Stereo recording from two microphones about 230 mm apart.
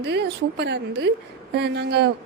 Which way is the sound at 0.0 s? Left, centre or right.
Right.